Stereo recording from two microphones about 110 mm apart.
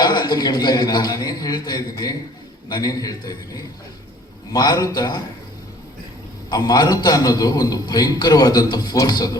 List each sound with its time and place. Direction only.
0.0 s a man's voice: 40° left (ahead or behind)
6.5 s a man's voice: 40° left (ahead or behind)